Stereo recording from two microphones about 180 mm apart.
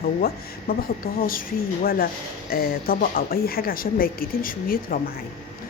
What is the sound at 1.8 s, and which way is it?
Speech, 55° left (ahead or behind).